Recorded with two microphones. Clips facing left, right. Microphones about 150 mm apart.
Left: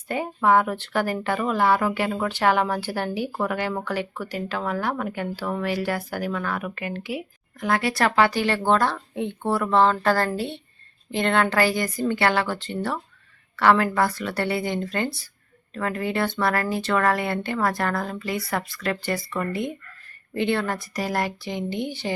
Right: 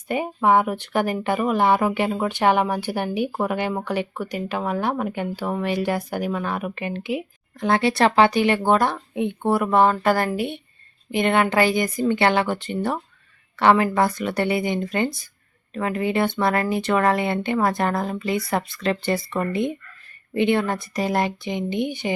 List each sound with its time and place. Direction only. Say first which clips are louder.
0.1 s speech: right 1 dB; 15° right (ahead or behind)